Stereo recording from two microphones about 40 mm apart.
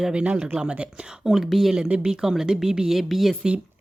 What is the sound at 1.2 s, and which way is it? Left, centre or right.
Speech, centre.